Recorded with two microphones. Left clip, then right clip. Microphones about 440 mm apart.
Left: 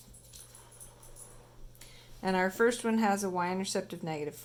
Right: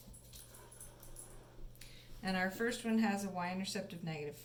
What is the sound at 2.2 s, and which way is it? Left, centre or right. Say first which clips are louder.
Speech: left 9 dB; centre.